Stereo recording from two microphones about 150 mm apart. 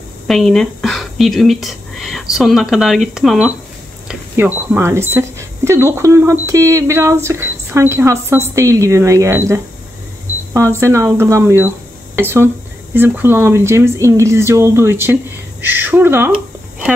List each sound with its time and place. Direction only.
0.3 s speech: 5° left (ahead or behind); by 9.4 s 20° right (ahead or behind)
10.8 s speech: 20° right (ahead or behind)